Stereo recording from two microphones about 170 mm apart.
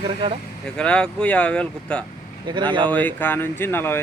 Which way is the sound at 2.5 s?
25° right (ahead or behind).